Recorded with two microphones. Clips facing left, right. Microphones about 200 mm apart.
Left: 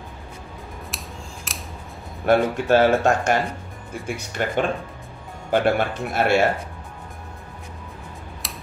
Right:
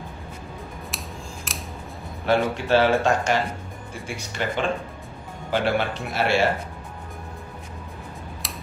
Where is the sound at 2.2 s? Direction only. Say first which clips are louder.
Left 3 dB; 50° left (ahead or behind).